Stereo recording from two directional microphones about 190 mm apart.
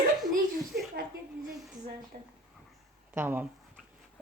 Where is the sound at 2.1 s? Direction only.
35° right (ahead or behind).